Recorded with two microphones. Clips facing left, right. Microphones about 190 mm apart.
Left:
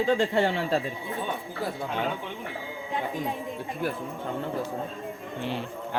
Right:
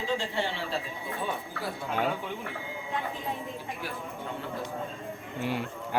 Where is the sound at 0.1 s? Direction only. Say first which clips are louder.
Left 5 dB; 55° left (ahead or behind).